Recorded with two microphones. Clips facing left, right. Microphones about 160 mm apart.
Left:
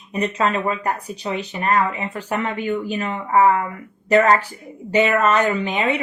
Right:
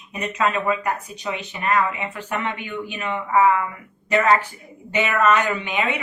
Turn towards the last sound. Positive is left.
turn(degrees=40)  # may be behind; listen again after turning